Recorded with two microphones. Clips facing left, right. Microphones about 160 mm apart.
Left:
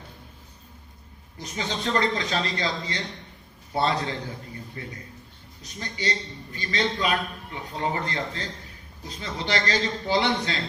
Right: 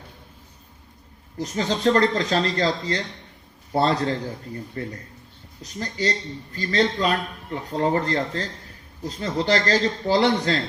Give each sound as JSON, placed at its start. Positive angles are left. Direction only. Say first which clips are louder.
{"t": 1.4, "sound": "a man's voice", "louder": "right 7 dB", "side_deg": -40}